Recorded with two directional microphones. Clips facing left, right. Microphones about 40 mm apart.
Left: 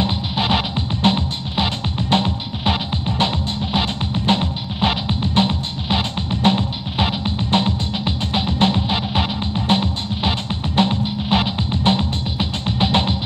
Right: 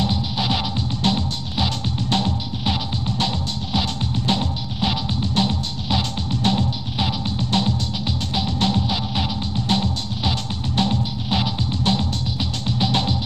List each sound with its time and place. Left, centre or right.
0.0 s music: left